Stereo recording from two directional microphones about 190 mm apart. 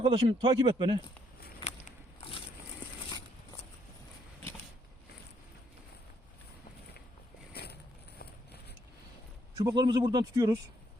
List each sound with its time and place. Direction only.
0.0 s speech: 30° right (ahead or behind)
1.6 s walk: 30° left (ahead or behind)
7.5 s mechanisms: 55° left (ahead or behind)
9.6 s speech: 20° right (ahead or behind)